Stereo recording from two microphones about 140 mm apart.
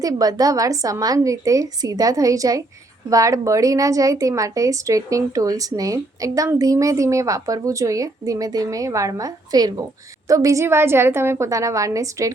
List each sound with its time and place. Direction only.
0.0 s a woman's voice: 25° right (ahead or behind)